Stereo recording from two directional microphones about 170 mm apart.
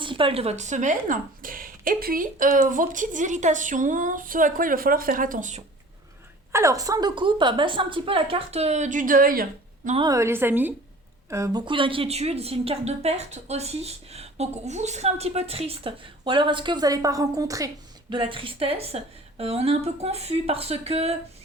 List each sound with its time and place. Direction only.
0.0 s speech: 30° right (ahead or behind); by 5.6 s 45° right (ahead or behind)
6.5 s a woman's voice: 15° right (ahead or behind); by 9.9 s 60° right (ahead or behind)
10.1 s a woman's voice: 15° right (ahead or behind); by 21.2 s 35° right (ahead or behind)